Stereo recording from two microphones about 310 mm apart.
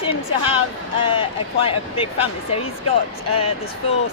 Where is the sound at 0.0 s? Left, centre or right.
Centre.